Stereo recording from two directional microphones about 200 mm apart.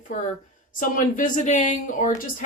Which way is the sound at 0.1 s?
40° left (ahead or behind).